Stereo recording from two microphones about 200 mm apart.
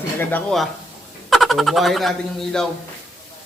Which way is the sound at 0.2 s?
10° left (ahead or behind).